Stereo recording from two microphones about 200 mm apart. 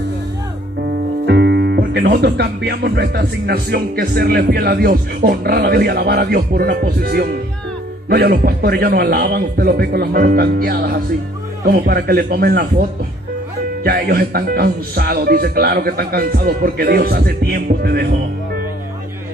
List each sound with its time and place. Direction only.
1.2 s speech: 55° right (ahead or behind)
13.8 s speech: 50° right (ahead or behind)